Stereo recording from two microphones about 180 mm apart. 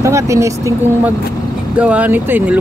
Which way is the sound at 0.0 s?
15° right (ahead or behind).